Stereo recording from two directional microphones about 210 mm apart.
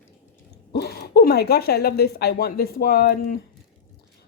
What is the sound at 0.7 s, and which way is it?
Speech, 50° left (ahead or behind).